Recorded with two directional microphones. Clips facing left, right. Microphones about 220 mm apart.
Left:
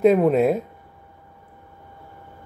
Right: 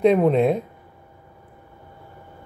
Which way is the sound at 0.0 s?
5° left (ahead or behind).